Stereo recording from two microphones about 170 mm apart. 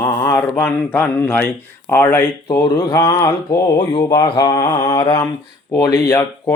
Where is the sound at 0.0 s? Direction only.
10° left (ahead or behind).